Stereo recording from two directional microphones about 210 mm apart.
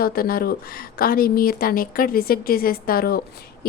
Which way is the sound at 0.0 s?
45° left (ahead or behind).